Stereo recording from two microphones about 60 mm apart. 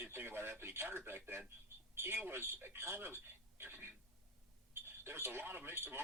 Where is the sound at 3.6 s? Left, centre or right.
Right.